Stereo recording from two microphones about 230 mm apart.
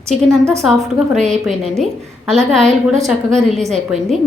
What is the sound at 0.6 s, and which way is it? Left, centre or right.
A woman's voice, centre.